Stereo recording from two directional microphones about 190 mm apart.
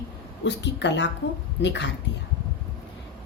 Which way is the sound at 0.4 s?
65° left (ahead or behind).